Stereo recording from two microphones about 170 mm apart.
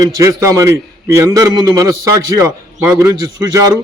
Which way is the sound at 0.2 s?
20° right (ahead or behind).